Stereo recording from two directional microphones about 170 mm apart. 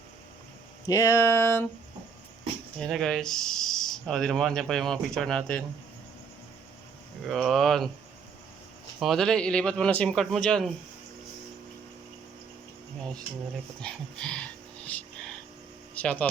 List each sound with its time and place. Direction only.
0.9 s a sound: 15° left (ahead or behind)
2.8 s speech: 5° left (ahead or behind)
7.3 s speech: centre (ahead or behind)
9.0 s speech: centre (ahead or behind)
13.8 s a sound: 5° left (ahead or behind)
16.0 s speech: 10° left (ahead or behind)